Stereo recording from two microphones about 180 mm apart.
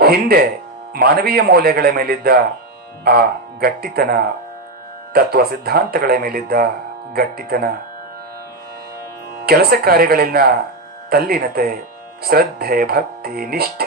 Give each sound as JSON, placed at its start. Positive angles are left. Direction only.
{"t": 0.0, "sound": "speech", "side_deg": -60}
{"t": 9.5, "sound": "speech", "side_deg": -60}